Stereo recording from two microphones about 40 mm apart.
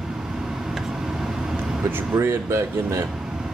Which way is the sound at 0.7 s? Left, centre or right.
Centre.